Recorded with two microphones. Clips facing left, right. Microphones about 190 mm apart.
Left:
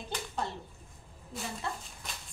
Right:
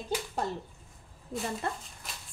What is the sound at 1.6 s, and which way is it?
Speech, 50° right (ahead or behind).